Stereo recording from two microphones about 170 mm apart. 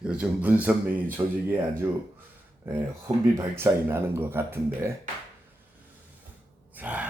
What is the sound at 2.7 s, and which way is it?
Speech, 10° right (ahead or behind).